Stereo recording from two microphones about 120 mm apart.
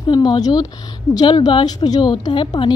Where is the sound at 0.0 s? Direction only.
35° left (ahead or behind).